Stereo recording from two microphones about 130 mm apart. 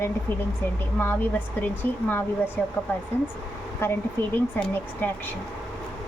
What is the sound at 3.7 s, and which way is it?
Speech, 20° left (ahead or behind).